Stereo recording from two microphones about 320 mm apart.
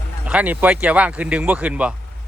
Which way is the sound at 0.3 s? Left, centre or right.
Centre.